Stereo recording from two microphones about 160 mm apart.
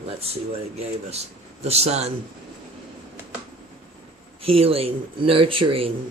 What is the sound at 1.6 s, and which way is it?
Speech, 40° right (ahead or behind).